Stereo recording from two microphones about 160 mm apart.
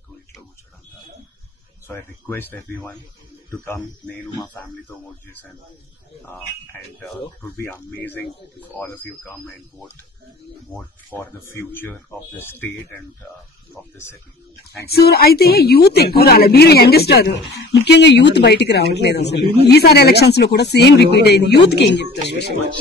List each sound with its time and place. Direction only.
1.9 s speech: 15° left (ahead or behind)
11.1 s speech: 15° left (ahead or behind)
13.8 s speech: 5° left (ahead or behind)
14.9 s a woman's voice: 80° left